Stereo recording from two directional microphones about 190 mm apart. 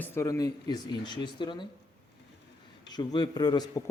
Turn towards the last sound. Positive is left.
turn(degrees=20)  # may be behind; listen again after turning